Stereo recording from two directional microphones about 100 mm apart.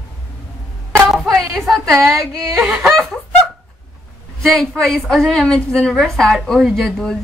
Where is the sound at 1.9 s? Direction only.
30° right (ahead or behind).